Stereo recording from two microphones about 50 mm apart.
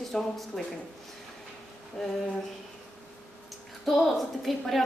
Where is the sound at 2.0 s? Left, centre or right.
Centre.